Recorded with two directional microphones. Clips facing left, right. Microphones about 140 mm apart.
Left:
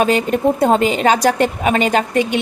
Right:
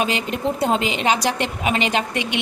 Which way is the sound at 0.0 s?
45° left (ahead or behind).